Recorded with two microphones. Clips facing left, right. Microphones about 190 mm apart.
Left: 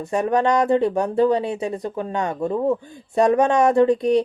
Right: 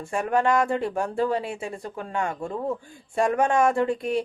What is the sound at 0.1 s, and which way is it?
Speech, 20° left (ahead or behind).